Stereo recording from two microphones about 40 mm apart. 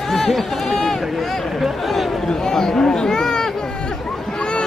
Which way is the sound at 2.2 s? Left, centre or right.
Centre.